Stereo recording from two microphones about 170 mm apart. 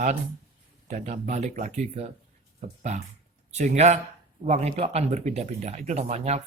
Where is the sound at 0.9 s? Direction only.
40° right (ahead or behind).